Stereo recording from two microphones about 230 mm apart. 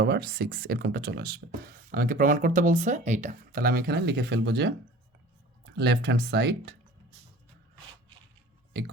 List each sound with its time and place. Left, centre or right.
0.0 s speech: right
5.7 s speech: right